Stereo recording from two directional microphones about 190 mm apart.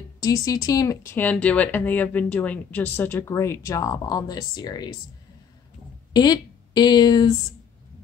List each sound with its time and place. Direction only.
0.2 s speech: 15° left (ahead or behind)
6.1 s speech: 20° left (ahead or behind)